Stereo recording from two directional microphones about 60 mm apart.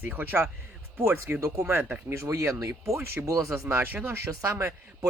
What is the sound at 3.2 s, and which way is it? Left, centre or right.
Speech, right.